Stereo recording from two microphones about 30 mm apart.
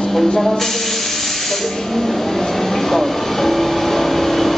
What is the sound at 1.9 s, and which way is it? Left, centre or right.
Train, centre.